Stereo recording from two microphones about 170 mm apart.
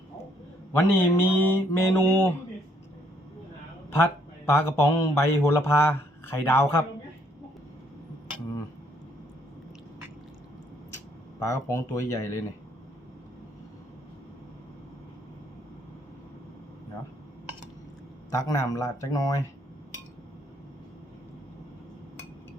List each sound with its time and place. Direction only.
0.7 s mantra: 15° left (ahead or behind)
3.8 s a man's voice: 15° left (ahead or behind)
5.5 s mantra: 15° left (ahead or behind)
11.3 s mantra: 20° left (ahead or behind)
18.3 s speech: 20° left (ahead or behind)